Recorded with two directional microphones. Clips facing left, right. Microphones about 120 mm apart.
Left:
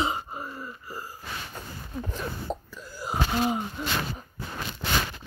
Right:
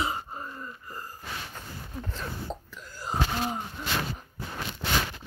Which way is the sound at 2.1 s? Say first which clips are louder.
Left 3 dB; 10° left (ahead or behind).